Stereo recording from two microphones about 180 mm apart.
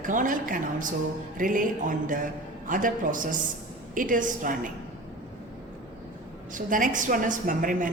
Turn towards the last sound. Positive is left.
turn(degrees=-50)  # may be behind; listen again after turning